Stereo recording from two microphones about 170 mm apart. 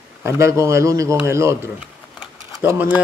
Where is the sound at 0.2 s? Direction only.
15° right (ahead or behind).